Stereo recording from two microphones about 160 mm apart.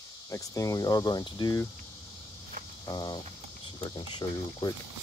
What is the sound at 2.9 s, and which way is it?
Speech, 25° left (ahead or behind).